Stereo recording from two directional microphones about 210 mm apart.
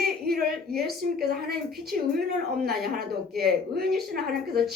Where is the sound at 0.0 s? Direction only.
45° right (ahead or behind).